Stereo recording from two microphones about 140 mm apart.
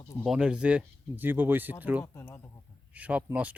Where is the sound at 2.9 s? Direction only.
10° right (ahead or behind).